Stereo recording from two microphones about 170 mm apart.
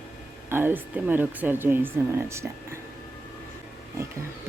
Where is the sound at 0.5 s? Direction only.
10° right (ahead or behind).